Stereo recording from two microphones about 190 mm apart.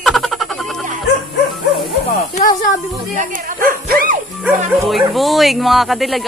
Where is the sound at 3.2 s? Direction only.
45° right (ahead or behind).